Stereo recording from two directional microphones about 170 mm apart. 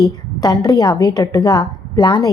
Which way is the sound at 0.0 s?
20° left (ahead or behind).